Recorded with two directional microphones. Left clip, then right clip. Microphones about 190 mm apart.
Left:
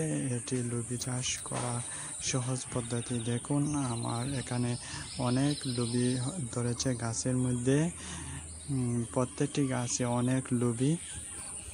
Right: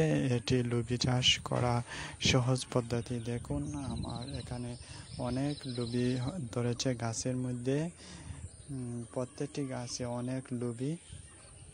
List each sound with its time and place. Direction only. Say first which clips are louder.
0.0 s speech: right 4 dB; 45° right (ahead or behind)
3.3 s speech: left 4 dB; 25° right (ahead or behind)
3.5 s speech: left 7 dB; 10° right (ahead or behind)
3.9 s speech: left 6 dB; 5° left (ahead or behind)
4.4 s speech: left 7 dB; 5° right (ahead or behind)
5.2 s speech: left 4 dB; 25° right (ahead or behind)
9.1 s speech: left 5 dB; 5° right (ahead or behind)